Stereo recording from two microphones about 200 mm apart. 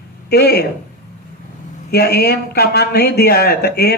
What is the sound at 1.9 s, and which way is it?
A woman's voice, 55° left (ahead or behind).